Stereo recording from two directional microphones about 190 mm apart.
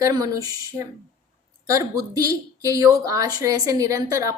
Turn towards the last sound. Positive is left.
turn(degrees=-15)  # may be behind; listen again after turning